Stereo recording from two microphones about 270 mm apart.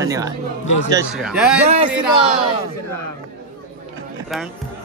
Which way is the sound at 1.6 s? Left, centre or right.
Right.